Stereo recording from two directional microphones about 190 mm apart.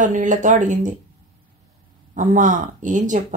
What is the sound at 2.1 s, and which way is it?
A woman's voice, 40° right (ahead or behind).